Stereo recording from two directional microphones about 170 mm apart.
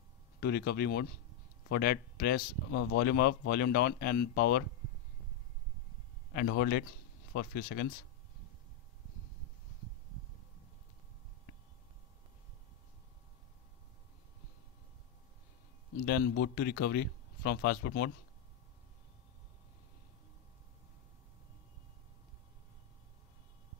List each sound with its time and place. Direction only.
0.4 s speech: 70° left (ahead or behind)
6.3 s speech: 65° left (ahead or behind)
16.1 s speech: 70° left (ahead or behind)